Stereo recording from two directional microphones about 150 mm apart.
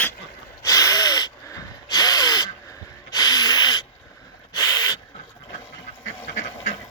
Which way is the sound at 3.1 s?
25° left (ahead or behind).